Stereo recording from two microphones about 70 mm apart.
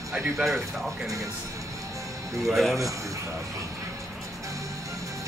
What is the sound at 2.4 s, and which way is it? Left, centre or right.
Speech, centre.